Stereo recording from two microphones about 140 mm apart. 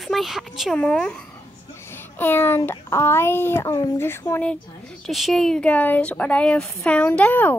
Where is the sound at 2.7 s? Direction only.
20° left (ahead or behind).